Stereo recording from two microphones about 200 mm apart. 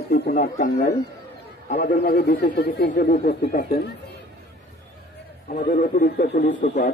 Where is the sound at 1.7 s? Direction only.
50° left (ahead or behind).